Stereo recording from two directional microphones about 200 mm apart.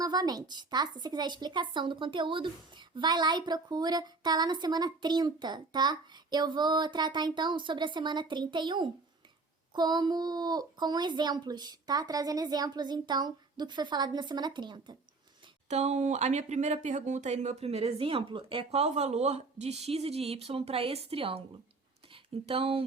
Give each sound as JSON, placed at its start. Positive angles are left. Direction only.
{"t": 0.0, "sound": "speech", "side_deg": -20}
{"t": 15.7, "sound": "speech", "side_deg": -35}